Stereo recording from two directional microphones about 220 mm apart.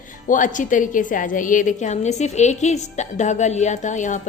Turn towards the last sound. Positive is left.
turn(degrees=35)  # may be behind; listen again after turning